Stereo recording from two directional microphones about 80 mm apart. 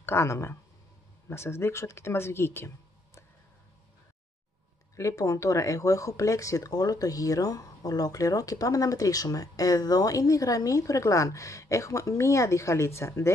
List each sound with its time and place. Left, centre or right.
0.0 s speech: left
4.9 s speech: left